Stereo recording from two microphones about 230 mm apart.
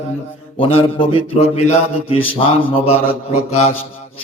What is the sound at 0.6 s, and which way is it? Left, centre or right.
Mantra, left.